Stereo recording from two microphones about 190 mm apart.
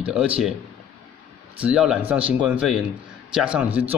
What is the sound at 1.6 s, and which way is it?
Speech, 5° right (ahead or behind).